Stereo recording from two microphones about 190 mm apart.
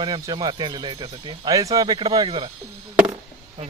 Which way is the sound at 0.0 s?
20° right (ahead or behind).